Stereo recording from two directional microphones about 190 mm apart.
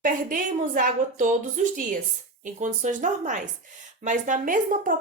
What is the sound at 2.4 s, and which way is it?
Speech, 40° right (ahead or behind).